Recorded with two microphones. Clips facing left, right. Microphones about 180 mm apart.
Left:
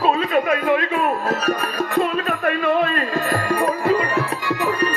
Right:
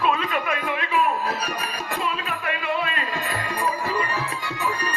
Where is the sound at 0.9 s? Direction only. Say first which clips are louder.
Left 3 dB; 45° left (ahead or behind).